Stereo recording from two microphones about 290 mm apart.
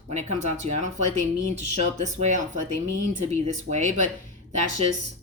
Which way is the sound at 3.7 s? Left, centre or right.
Right.